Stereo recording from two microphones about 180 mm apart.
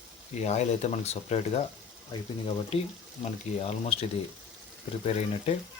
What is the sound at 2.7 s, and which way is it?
Speech, 35° left (ahead or behind).